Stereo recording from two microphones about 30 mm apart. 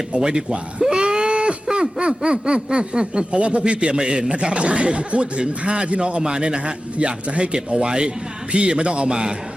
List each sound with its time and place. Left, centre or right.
0.2 s speech: right
0.8 s a sound: right
1.6 s a man's voice: right